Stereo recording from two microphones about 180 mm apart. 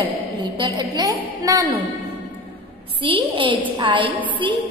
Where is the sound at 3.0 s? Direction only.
30° right (ahead or behind).